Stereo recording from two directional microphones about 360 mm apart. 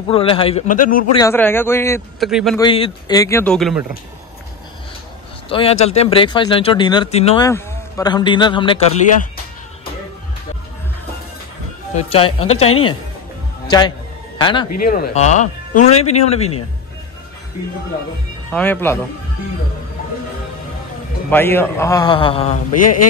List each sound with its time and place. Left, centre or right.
0.1 s speech: centre
1.2 s speech: centre
2.6 s speech: centre
5.5 s speech: centre
11.9 s speech: centre
13.7 s speech: centre
14.8 s speech: left
18.5 s speech: centre
21.3 s speech: centre
22.7 s mantra: left